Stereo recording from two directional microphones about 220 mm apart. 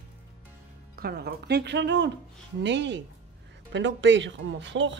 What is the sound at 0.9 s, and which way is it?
Speech, 45° right (ahead or behind).